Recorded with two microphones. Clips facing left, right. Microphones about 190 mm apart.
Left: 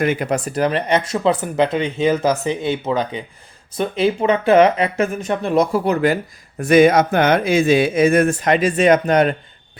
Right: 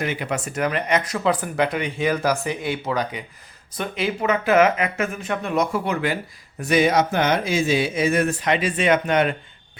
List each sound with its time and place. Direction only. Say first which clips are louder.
0.0 s speech: left 7 dB; 45° left (ahead or behind)
6.6 s speech: left 6 dB; 50° left (ahead or behind)